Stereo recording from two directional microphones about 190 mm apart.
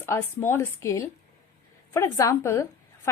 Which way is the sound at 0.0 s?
15° left (ahead or behind).